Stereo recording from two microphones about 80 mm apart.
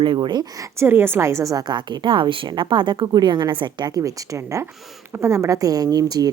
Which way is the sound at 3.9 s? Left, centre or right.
Right.